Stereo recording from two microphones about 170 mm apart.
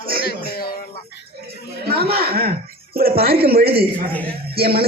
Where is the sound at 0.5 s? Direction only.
65° left (ahead or behind).